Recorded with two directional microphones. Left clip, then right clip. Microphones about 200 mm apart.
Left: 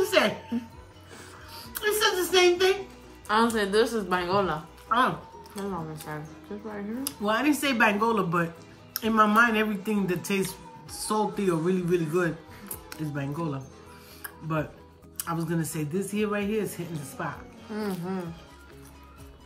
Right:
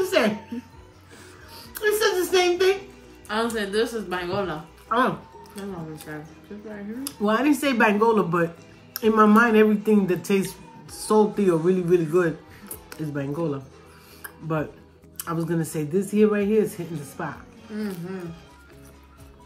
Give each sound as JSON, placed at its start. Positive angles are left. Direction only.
{"t": 0.0, "sound": "speech", "side_deg": -10}
{"t": 3.3, "sound": "a woman's voice", "side_deg": 30}
{"t": 4.8, "sound": "speech", "side_deg": -10}
{"t": 6.1, "sound": "a woman's voice", "side_deg": 25}
{"t": 7.1, "sound": "speech", "side_deg": -10}
{"t": 14.2, "sound": "music", "side_deg": -5}
{"t": 15.1, "sound": "speech", "side_deg": -5}